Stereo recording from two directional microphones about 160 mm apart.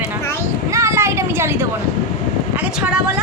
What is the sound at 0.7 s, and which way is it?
Vehicle, 20° right (ahead or behind).